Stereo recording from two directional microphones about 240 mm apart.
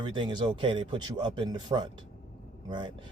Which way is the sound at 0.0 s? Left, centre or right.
Centre.